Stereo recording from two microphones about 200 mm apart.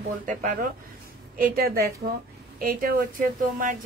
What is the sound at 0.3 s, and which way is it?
A woman's voice, 40° right (ahead or behind).